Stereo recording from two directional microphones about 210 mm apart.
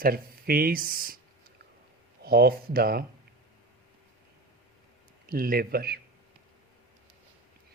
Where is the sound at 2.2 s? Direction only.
45° right (ahead or behind).